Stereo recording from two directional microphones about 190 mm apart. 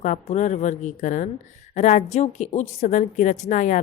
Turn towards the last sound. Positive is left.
turn(degrees=40)  # may be behind; listen again after turning